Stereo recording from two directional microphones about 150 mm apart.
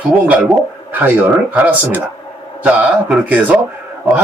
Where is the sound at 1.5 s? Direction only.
10° right (ahead or behind).